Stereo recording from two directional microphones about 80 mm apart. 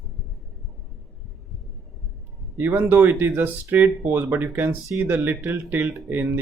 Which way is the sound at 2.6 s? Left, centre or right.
Right.